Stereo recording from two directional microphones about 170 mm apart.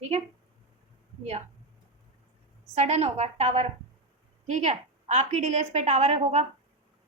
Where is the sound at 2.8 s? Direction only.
40° right (ahead or behind).